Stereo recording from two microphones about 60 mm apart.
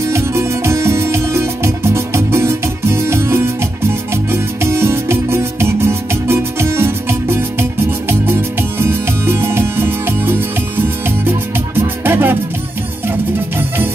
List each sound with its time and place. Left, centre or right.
0.0 s music: right